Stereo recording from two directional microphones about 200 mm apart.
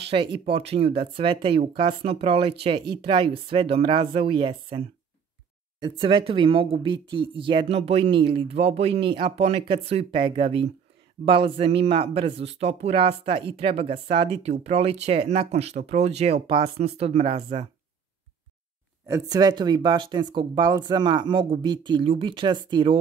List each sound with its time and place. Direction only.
0.1 s speech: 25° right (ahead or behind)
19.0 s speech: 15° right (ahead or behind)